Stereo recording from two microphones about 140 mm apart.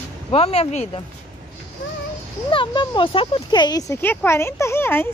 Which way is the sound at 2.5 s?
35° left (ahead or behind).